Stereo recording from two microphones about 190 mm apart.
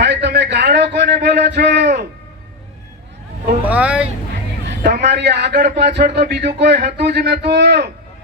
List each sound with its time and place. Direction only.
0.0 s a sound: 65° right (ahead or behind)
3.6 s vehicle: 10° right (ahead or behind)
4.6 s a man's voice: 60° right (ahead or behind)